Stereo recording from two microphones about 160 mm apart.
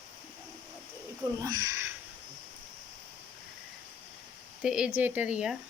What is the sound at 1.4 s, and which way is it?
Speech, 25° right (ahead or behind).